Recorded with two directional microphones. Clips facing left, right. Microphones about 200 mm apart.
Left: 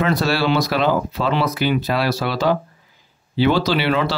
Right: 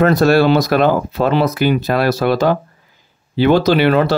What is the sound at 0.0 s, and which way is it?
Speech, 50° right (ahead or behind).